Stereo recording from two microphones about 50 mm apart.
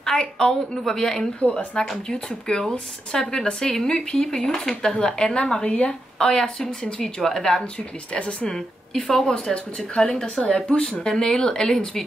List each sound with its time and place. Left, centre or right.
0.2 s speech: centre
8.1 s speech: left
9.1 s speech: centre